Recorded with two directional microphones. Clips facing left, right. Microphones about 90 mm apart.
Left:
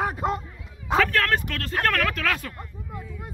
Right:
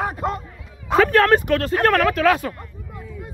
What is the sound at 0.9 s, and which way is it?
Speech, 25° right (ahead or behind).